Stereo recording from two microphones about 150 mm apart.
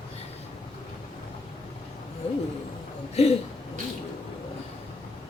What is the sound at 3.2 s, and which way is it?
Speech, 45° left (ahead or behind).